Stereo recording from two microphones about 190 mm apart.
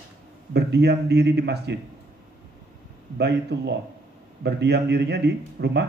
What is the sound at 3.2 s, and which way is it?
Speech, 60° right (ahead or behind).